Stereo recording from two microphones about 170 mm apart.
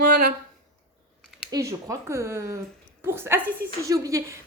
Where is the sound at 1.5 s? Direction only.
20° right (ahead or behind).